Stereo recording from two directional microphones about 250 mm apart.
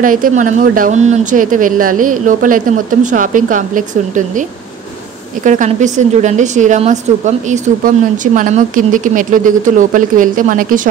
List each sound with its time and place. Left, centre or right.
0.0 s a woman's voice: right